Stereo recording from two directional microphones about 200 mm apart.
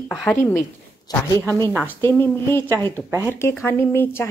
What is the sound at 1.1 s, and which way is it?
A woman's voice, 15° left (ahead or behind).